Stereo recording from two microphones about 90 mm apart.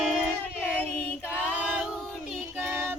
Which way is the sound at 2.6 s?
25° right (ahead or behind).